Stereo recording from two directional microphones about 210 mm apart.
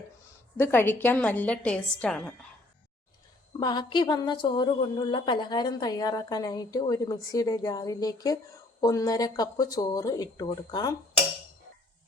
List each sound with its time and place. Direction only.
0.5 s speech: 10° left (ahead or behind)
3.6 s a woman's voice: 20° left (ahead or behind)